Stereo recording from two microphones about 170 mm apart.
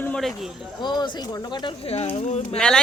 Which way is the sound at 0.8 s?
25° left (ahead or behind).